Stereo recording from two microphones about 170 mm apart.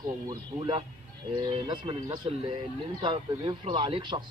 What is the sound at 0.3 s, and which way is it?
Speech, 25° right (ahead or behind).